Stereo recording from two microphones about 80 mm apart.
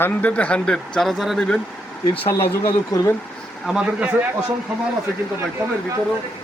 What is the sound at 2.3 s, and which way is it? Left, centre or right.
Speech, left.